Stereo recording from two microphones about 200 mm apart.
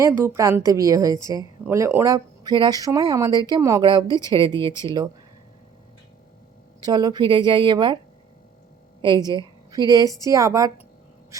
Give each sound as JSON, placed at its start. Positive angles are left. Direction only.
{"t": 0.0, "sound": "a woman's voice", "side_deg": -15}
{"t": 6.8, "sound": "speech", "side_deg": -20}
{"t": 9.0, "sound": "a woman's voice", "side_deg": -25}